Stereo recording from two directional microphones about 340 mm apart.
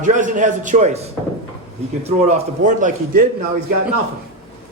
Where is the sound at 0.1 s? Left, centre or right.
Right.